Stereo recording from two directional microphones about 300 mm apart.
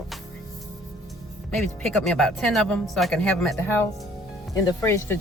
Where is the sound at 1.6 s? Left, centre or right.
Centre.